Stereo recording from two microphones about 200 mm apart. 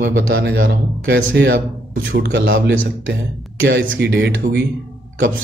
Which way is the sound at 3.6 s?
65° right (ahead or behind).